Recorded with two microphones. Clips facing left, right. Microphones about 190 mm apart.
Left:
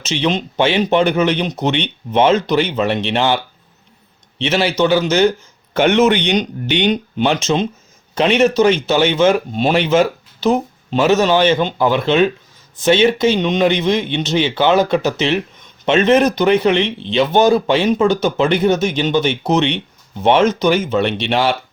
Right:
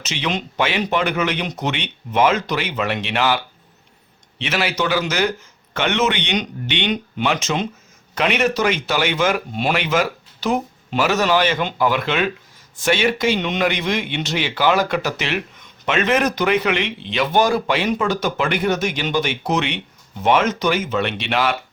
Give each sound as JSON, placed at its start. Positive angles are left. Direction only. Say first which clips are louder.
{"t": 0.0, "sound": "a man's voice", "louder": "left 6 dB", "side_deg": 30}
{"t": 5.7, "sound": "speech", "louder": "left 7 dB", "side_deg": 40}